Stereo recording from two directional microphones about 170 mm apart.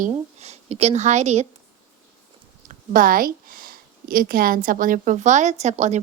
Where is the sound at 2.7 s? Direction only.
55° right (ahead or behind).